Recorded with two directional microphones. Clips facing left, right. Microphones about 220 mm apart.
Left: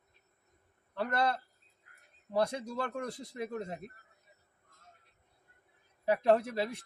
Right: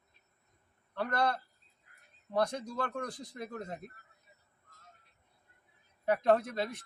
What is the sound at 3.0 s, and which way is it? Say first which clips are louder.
Speech: left 2 dB; 25° left (ahead or behind).